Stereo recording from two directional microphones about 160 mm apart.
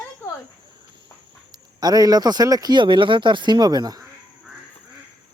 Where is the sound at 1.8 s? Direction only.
25° right (ahead or behind).